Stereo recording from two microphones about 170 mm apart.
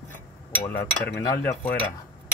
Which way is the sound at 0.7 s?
15° left (ahead or behind).